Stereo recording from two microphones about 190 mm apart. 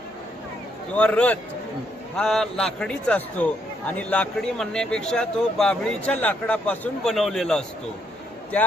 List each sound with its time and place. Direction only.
0.9 s a man's voice: 5° left (ahead or behind)